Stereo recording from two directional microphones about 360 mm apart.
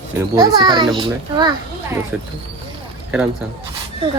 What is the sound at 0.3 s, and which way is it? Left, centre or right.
Speech, centre.